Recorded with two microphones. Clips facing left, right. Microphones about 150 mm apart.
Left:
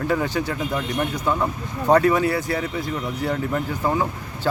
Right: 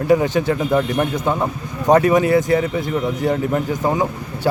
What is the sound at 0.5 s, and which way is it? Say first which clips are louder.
Speech: right 7 dB; 50° right (ahead or behind).